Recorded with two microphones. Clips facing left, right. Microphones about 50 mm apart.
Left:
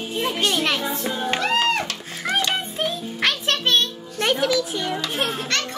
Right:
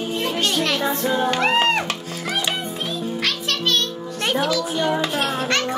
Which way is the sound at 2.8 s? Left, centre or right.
Left.